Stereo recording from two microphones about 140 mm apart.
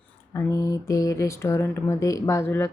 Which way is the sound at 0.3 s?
25° left (ahead or behind).